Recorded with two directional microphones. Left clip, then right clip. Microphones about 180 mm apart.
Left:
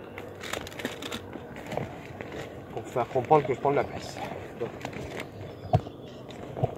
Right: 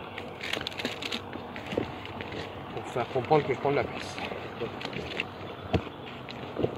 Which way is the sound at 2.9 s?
Centre (ahead or behind).